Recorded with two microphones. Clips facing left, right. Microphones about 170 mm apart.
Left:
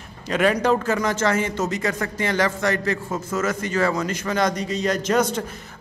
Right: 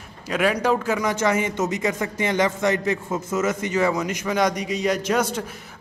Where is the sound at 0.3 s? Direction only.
5° right (ahead or behind).